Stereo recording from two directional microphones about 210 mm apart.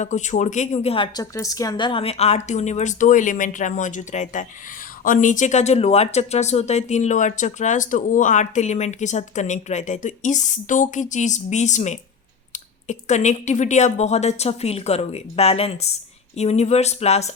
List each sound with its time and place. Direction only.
0.0 s speech: 35° left (ahead or behind)